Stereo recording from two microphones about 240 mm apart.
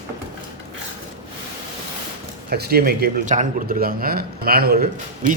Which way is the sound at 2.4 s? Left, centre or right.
Right.